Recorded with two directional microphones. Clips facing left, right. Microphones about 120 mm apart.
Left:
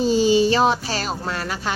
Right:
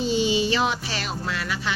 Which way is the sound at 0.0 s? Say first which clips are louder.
Left 6 dB; 40° left (ahead or behind).